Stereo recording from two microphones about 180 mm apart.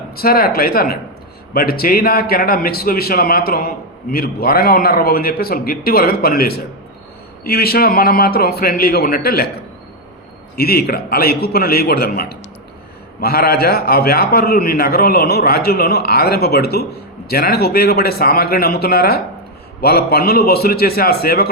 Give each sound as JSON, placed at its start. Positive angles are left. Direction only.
{"t": 0.2, "sound": "a man's voice", "side_deg": 55}
{"t": 10.6, "sound": "a man's voice", "side_deg": 60}